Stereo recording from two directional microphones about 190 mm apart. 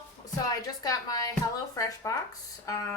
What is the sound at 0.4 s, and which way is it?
A woman's voice, 20° left (ahead or behind).